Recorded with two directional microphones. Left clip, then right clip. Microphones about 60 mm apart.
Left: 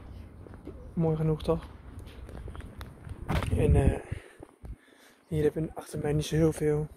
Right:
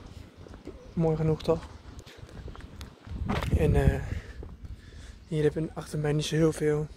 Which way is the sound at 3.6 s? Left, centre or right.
Right.